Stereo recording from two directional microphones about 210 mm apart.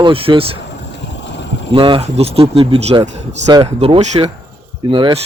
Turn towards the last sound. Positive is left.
turn(degrees=-20)  # may be behind; listen again after turning